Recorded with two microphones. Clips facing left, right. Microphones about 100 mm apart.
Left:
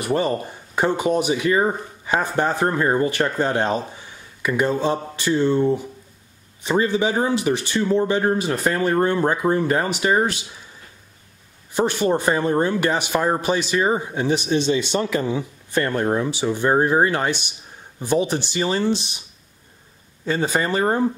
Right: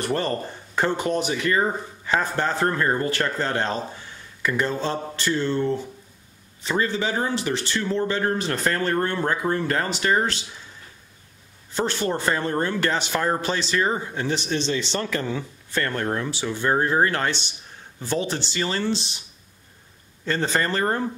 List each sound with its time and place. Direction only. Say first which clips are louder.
0.0 s speech: left 3 dB; 10° left (ahead or behind)
11.7 s speech: left 5 dB; 15° left (ahead or behind)
20.2 s speech: left 2 dB; 10° left (ahead or behind)